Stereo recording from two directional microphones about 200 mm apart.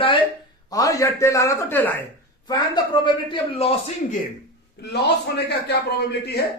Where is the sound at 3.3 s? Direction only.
30° left (ahead or behind).